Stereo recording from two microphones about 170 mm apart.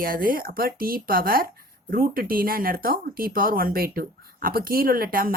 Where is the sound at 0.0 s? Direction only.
60° right (ahead or behind).